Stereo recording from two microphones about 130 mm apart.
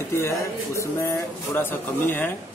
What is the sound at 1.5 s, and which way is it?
Speech, 15° left (ahead or behind).